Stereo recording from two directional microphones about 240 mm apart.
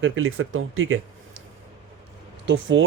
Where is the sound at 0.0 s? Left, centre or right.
Right.